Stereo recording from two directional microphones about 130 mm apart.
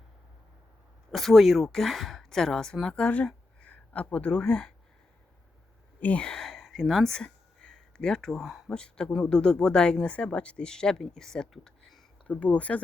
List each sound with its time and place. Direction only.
1.1 s speech: centre (ahead or behind)
6.0 s speech: 10° left (ahead or behind)